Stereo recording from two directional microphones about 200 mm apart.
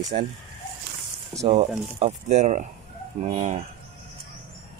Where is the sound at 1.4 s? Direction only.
30° right (ahead or behind).